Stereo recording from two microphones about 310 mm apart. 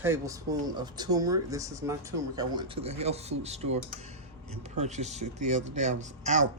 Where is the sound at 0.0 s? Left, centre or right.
Centre.